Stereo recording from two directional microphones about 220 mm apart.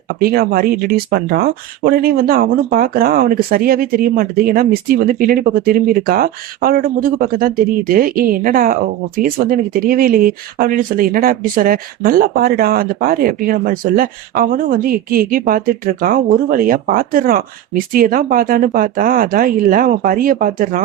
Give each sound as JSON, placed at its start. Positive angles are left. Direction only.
{"t": 0.1, "sound": "speech", "side_deg": -45}